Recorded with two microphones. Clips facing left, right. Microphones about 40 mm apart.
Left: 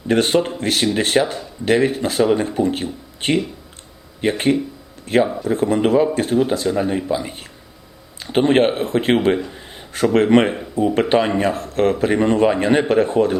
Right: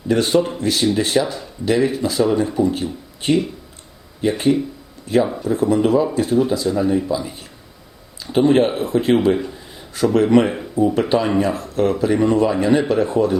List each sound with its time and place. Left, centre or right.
0.1 s speech: left